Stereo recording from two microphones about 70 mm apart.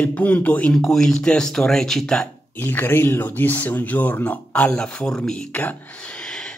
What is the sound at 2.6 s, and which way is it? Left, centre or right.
Speech, left.